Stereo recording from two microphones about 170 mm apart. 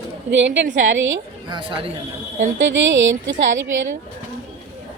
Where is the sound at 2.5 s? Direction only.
90° right.